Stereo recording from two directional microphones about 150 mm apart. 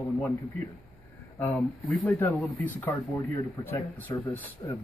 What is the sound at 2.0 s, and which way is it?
Speech, 15° left (ahead or behind).